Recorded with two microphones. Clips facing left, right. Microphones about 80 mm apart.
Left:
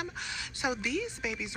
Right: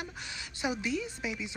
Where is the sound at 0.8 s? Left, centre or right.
Right.